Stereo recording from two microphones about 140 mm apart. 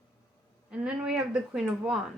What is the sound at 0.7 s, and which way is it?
Speech, 10° right (ahead or behind).